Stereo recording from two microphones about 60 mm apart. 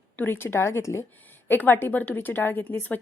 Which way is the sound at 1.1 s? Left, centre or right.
Left.